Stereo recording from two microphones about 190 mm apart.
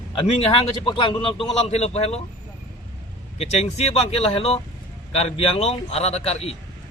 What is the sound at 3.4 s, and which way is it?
Speech, 35° left (ahead or behind).